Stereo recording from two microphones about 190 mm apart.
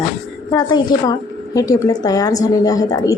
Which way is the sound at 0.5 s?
20° left (ahead or behind).